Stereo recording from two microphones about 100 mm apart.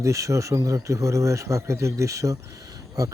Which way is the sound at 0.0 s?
30° right (ahead or behind).